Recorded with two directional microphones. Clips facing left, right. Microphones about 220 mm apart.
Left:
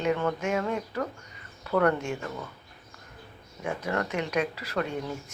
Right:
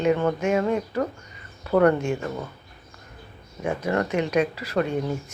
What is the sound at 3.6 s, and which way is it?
Speech, 20° right (ahead or behind).